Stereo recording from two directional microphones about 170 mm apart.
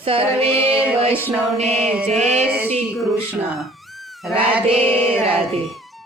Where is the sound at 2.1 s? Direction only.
40° right (ahead or behind).